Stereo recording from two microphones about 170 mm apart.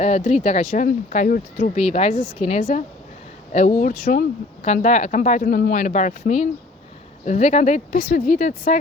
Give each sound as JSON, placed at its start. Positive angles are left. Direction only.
{"t": 0.0, "sound": "speech", "side_deg": 40}
{"t": 4.6, "sound": "speech", "side_deg": 45}